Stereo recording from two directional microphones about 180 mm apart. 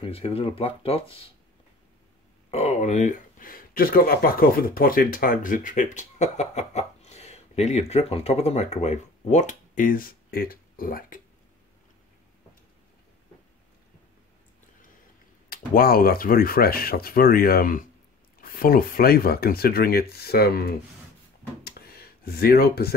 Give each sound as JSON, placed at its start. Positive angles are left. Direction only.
{"t": 0.0, "sound": "speech", "side_deg": 30}
{"t": 2.5, "sound": "speech", "side_deg": 40}
{"t": 15.5, "sound": "speech", "side_deg": 55}
{"t": 21.6, "sound": "a sound", "side_deg": 60}